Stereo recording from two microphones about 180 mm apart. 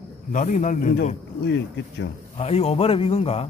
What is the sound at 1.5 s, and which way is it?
Speech, 75° left (ahead or behind).